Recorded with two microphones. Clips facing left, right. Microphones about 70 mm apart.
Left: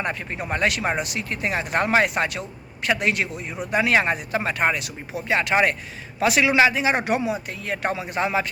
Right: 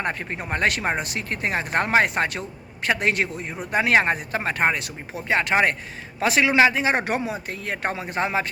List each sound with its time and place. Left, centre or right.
0.0 s speech: right